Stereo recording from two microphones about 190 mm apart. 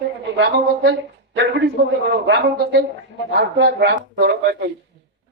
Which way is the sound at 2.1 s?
65° right (ahead or behind).